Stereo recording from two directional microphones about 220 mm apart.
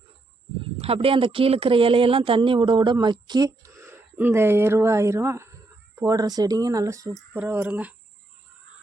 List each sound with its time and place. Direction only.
0.8 s speech: 25° right (ahead or behind); by 7.9 s 5° right (ahead or behind)